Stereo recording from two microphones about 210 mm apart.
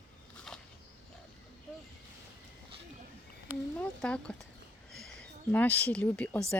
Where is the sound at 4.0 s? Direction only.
5° left (ahead or behind).